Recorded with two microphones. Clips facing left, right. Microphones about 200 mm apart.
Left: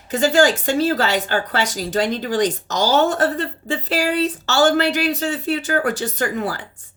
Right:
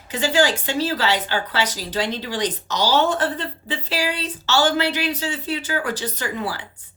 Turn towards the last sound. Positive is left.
turn(degrees=45)  # may be behind; listen again after turning